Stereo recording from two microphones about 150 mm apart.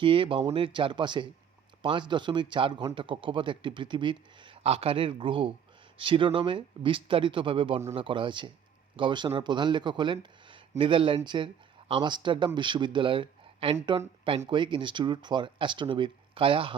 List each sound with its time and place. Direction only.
0.0 s speech: 35° right (ahead or behind)